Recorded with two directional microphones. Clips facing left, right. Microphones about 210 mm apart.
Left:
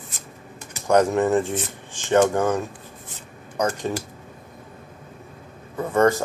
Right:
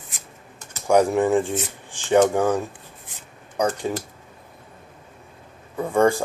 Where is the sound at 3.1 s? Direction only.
15° right (ahead or behind).